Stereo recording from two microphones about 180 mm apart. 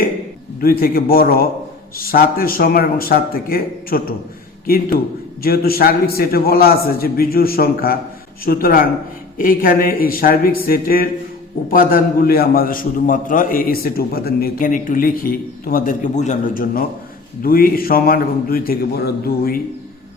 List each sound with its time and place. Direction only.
0.6 s a man's voice: 55° left (ahead or behind)